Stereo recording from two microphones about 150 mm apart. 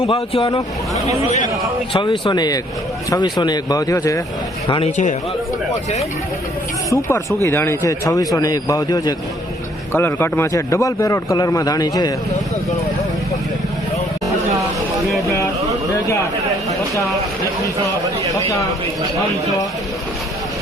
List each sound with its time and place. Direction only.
0.0 s speech: 40° left (ahead or behind)
1.9 s a man's voice: 35° left (ahead or behind)
6.9 s a man's voice: 20° left (ahead or behind)